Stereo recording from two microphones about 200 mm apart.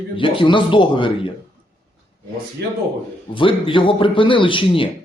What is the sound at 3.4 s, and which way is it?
Speech, 25° left (ahead or behind).